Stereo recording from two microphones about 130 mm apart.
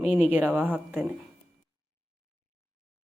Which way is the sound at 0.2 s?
15° right (ahead or behind).